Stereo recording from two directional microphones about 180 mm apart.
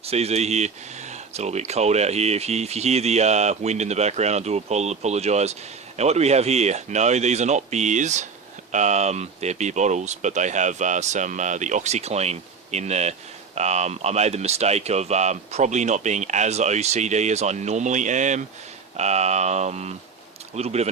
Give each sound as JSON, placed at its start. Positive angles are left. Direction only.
{"t": 0.0, "sound": "speech", "side_deg": -35}